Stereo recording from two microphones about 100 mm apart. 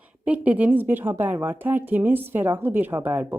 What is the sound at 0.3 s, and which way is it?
A woman's voice, 15° right (ahead or behind).